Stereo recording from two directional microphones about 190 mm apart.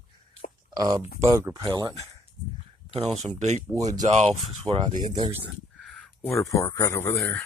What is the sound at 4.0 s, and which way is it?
Speech, 35° right (ahead or behind).